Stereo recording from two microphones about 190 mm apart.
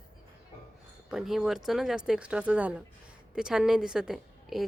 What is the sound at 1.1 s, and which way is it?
A woman's voice, centre (ahead or behind).